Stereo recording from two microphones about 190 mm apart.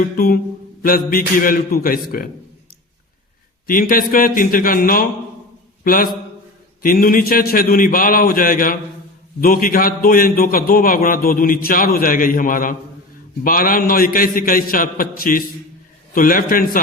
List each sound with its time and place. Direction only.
0.8 s a man's voice: 50° left (ahead or behind)
3.7 s a man's voice: 45° left (ahead or behind)